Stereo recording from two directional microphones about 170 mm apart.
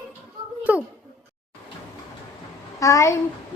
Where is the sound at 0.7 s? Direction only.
10° right (ahead or behind).